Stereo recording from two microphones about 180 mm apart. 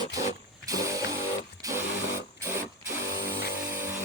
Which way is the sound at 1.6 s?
15° right (ahead or behind).